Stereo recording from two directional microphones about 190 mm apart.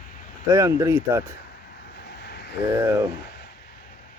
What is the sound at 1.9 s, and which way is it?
Vehicle, 65° left (ahead or behind).